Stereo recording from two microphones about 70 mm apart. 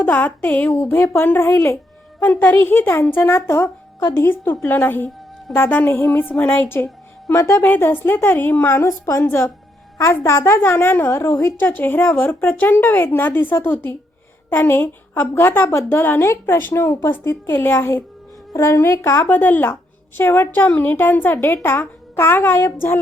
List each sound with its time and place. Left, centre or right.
0.0 s speech: left
2.2 s speech: left
7.3 s a woman's voice: left
7.6 s speech: left
10.8 s speech: left
16.2 s speech: left
18.5 s speech: left
19.3 s a woman's voice: left